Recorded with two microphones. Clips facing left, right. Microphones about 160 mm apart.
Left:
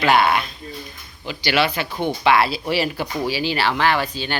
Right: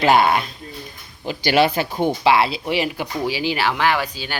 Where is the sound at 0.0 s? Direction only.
40° right (ahead or behind).